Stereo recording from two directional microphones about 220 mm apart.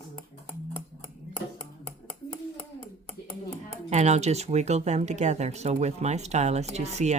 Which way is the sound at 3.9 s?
30° right (ahead or behind).